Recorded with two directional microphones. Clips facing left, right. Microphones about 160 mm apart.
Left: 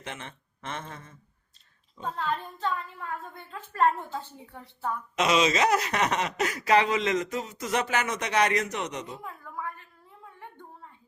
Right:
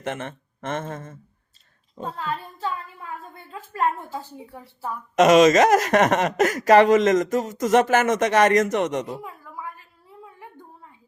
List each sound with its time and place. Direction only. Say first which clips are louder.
0.0 s speech: right 10 dB; 50° right (ahead or behind)
2.1 s a woman's voice: left 1 dB; 5° right (ahead or behind)
5.1 s speech: right 11 dB; 45° right (ahead or behind)
9.2 s a sound: right 1 dB; 10° right (ahead or behind)